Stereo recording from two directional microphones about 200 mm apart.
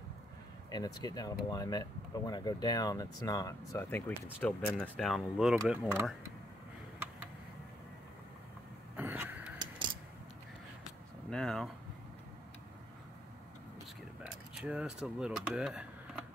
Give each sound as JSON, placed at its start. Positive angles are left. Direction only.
{"t": 0.7, "sound": "speech", "side_deg": 20}
{"t": 8.9, "sound": "a sound", "side_deg": -10}
{"t": 11.2, "sound": "speech", "side_deg": 5}
{"t": 14.5, "sound": "speech", "side_deg": -5}